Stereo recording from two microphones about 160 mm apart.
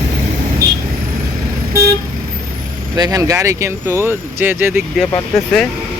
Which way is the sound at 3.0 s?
20° right (ahead or behind).